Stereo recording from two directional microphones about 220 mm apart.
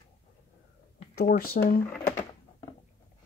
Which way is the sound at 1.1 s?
40° left (ahead or behind).